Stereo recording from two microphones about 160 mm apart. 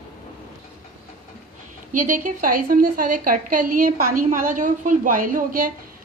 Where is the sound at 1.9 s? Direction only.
55° right (ahead or behind).